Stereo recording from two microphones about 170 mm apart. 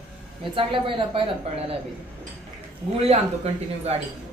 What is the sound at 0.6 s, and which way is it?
Speech, 30° right (ahead or behind).